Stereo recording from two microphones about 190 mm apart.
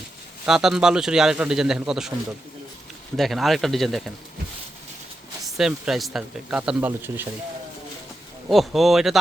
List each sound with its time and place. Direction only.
0.4 s speech: 5° right (ahead or behind)
3.2 s speech: centre (ahead or behind)
5.5 s speech: centre (ahead or behind)
8.4 s speech: centre (ahead or behind)